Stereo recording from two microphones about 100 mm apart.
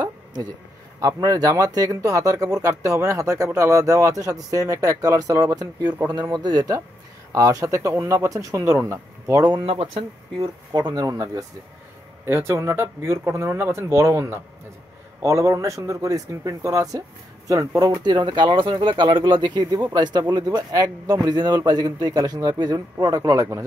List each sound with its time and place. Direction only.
0.9 s speech: 35° right (ahead or behind)
7.3 s speech: 30° right (ahead or behind)
9.6 s speech: 80° right
10.7 s speech: 40° right (ahead or behind)
12.3 s a man's voice: 25° right (ahead or behind)